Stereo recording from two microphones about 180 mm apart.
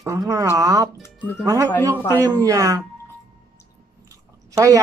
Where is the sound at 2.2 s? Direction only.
20° right (ahead or behind).